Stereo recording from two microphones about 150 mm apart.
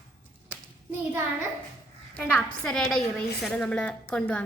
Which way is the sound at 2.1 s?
10° left (ahead or behind).